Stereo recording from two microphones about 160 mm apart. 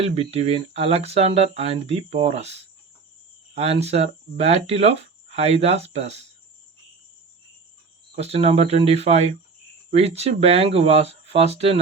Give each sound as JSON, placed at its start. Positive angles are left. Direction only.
{"t": 0.0, "sound": "speech", "side_deg": -40}
{"t": 8.1, "sound": "speech", "side_deg": -40}